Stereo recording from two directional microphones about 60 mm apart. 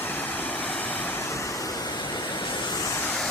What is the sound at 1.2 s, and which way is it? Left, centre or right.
Waves, left.